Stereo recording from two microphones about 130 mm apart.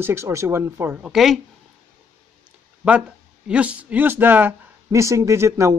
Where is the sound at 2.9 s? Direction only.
10° right (ahead or behind).